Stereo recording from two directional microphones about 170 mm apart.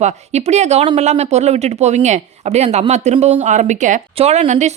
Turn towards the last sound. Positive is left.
turn(degrees=-40)  # may be behind; listen again after turning